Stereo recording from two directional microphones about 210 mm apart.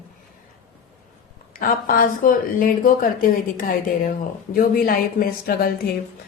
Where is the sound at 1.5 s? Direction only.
40° left (ahead or behind).